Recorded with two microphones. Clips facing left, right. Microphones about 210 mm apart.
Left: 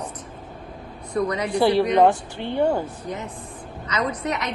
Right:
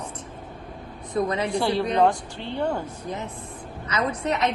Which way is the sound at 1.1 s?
25° right (ahead or behind).